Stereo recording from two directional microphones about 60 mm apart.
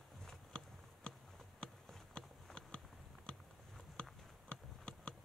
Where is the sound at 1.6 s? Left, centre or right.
Centre.